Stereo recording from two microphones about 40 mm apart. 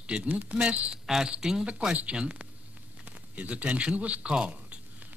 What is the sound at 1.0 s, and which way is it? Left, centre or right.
Speech, centre.